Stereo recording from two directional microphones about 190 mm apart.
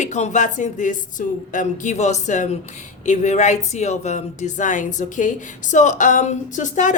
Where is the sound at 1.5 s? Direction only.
40° left (ahead or behind).